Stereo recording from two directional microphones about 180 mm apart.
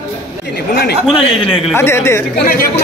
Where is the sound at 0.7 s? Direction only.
60° left (ahead or behind).